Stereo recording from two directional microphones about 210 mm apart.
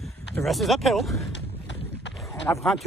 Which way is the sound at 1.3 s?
60° left (ahead or behind).